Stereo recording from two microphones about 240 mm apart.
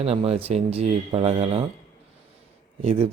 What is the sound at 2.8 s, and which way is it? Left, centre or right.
Speech, right.